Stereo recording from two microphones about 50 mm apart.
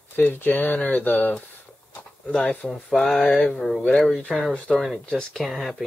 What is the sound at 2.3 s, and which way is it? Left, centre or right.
Speech, left.